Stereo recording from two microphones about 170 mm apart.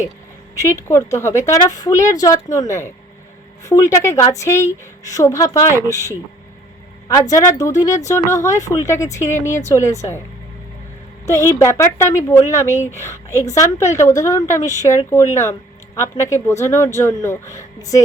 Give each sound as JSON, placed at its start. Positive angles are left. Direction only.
{"t": 0.9, "sound": "speech", "side_deg": 15}
{"t": 7.3, "sound": "speech", "side_deg": 20}
{"t": 11.3, "sound": "speech", "side_deg": 15}